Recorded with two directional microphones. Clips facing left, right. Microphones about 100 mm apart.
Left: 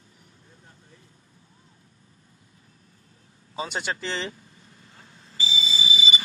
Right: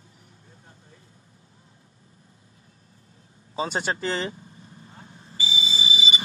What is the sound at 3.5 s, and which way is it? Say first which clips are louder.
Speech: right 3 dB; 35° right (ahead or behind).